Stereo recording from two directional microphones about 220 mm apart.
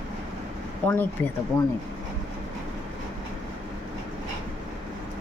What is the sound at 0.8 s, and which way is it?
Speech, 5° left (ahead or behind).